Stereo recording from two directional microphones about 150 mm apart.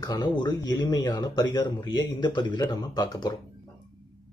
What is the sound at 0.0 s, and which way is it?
Speech, 25° left (ahead or behind).